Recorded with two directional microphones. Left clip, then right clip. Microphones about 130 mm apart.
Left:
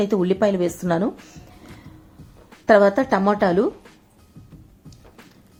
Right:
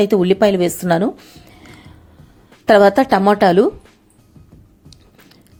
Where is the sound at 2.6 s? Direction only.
20° right (ahead or behind).